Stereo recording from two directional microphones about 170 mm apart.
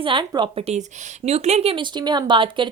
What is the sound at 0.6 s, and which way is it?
Speech, 40° right (ahead or behind).